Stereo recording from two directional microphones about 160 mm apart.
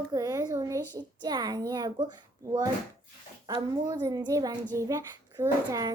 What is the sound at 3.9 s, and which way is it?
Speech, 25° right (ahead or behind).